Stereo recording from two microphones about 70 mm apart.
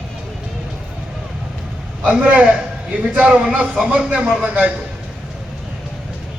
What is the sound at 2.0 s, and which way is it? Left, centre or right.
A man's voice, centre.